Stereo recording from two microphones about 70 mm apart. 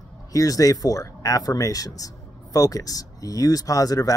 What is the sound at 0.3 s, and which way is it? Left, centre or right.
Speech, left.